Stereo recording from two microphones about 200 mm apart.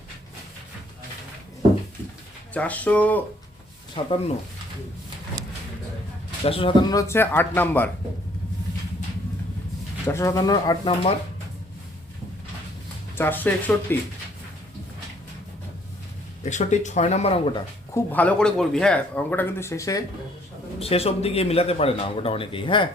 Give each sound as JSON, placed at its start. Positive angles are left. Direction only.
{"t": 2.5, "sound": "speech", "side_deg": 5}
{"t": 3.9, "sound": "a man's voice", "side_deg": 25}
{"t": 6.4, "sound": "a man's voice", "side_deg": 30}
{"t": 7.1, "sound": "speech", "side_deg": 10}
{"t": 10.1, "sound": "speech", "side_deg": 15}
{"t": 13.1, "sound": "speech", "side_deg": 10}
{"t": 16.4, "sound": "speech", "side_deg": 35}
{"t": 17.9, "sound": "speech", "side_deg": 10}
{"t": 20.7, "sound": "a man's voice", "side_deg": 30}